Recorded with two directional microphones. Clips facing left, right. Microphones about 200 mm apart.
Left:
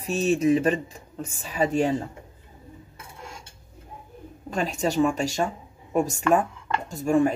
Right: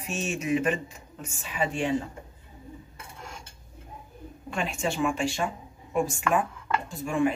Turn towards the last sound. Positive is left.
turn(degrees=40)  # may be behind; listen again after turning